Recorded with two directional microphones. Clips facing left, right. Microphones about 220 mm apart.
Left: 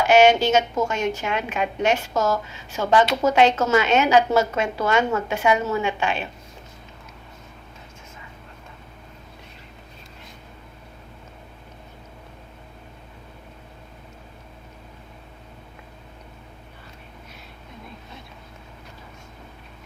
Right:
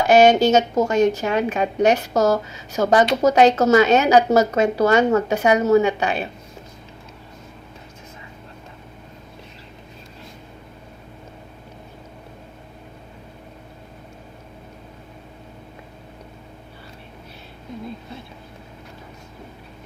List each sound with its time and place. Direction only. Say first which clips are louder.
0.1 s a woman's voice: right 3 dB; 40° right (ahead or behind)